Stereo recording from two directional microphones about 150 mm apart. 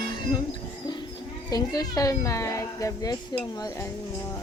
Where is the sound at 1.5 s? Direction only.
25° left (ahead or behind).